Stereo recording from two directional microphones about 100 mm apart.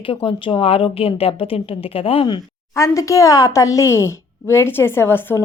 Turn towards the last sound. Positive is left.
turn(degrees=25)  # may be behind; listen again after turning